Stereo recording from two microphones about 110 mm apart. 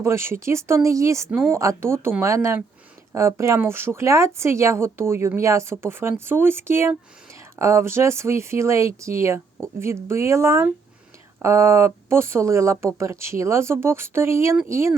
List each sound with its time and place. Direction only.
0.0 s speech: 25° right (ahead or behind)